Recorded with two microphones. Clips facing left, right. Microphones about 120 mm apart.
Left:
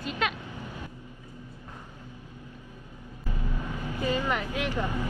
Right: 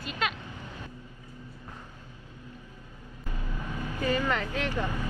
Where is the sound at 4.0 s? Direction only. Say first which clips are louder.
Even; 15° left (ahead or behind).